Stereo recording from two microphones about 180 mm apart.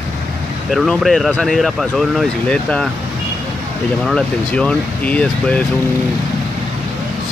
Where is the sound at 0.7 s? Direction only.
Centre (ahead or behind).